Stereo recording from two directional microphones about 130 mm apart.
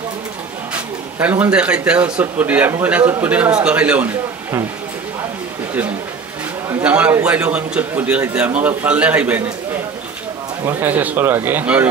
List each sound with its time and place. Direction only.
1.2 s speech: 10° right (ahead or behind)
6.8 s a man's voice: 10° right (ahead or behind)
10.6 s speech: 15° right (ahead or behind)